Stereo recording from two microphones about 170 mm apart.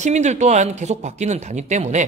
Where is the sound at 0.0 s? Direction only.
45° right (ahead or behind).